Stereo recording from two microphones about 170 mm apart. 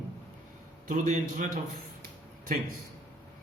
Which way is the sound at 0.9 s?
50° right (ahead or behind).